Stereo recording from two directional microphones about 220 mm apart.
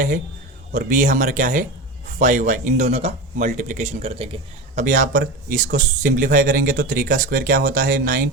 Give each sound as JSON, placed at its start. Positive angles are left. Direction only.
{"t": 0.7, "sound": "speech", "side_deg": -35}